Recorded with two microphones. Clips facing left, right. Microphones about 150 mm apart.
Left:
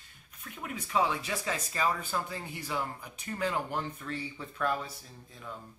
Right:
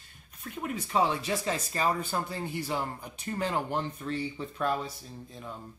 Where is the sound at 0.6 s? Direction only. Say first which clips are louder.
Right 2 dB; 35° right (ahead or behind).